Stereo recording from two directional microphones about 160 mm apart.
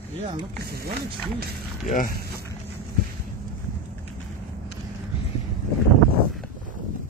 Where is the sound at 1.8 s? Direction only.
55° left (ahead or behind).